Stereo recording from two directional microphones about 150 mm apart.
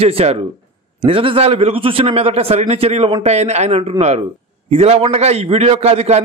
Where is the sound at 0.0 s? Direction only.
40° right (ahead or behind).